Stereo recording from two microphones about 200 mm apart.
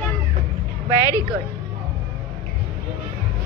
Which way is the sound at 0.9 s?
15° left (ahead or behind).